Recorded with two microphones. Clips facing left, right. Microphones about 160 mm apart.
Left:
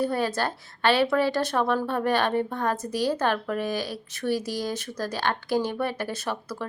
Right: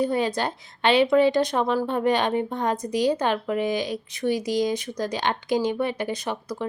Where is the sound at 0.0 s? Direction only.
15° right (ahead or behind).